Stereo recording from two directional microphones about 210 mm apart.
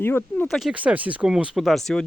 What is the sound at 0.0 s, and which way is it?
Speech, 10° left (ahead or behind).